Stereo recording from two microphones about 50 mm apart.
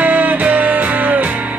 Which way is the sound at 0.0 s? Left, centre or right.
Right.